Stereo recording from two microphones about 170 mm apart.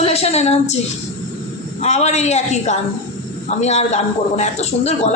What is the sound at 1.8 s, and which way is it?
Speech, 40° left (ahead or behind).